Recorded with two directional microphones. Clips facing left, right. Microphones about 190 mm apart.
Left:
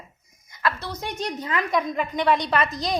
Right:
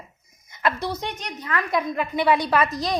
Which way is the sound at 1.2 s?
30° left (ahead or behind).